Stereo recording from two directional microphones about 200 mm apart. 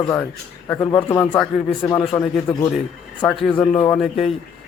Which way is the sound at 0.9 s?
10° left (ahead or behind).